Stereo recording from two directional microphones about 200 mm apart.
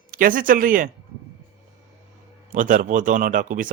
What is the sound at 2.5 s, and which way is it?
Speech, 40° right (ahead or behind).